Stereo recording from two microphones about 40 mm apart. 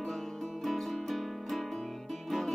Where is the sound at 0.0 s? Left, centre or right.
Centre.